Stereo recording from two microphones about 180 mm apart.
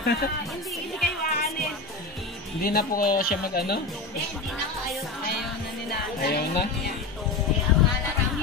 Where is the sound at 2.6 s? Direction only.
55° left (ahead or behind).